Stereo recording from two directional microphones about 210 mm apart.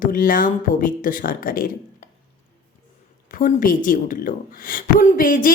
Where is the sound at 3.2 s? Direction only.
40° left (ahead or behind).